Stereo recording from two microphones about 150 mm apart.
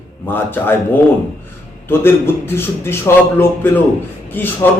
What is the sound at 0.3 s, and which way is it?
Speech, 15° left (ahead or behind).